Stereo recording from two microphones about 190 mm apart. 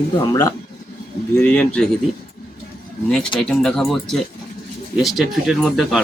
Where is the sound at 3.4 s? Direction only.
5° left (ahead or behind).